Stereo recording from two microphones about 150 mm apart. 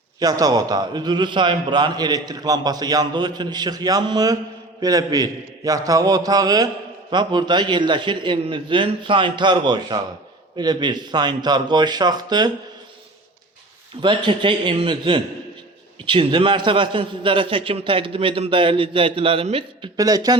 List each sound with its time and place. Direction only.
0.2 s a man's voice: 25° right (ahead or behind)
14.0 s a man's voice: 30° right (ahead or behind)
20.0 s a man's voice: 25° right (ahead or behind)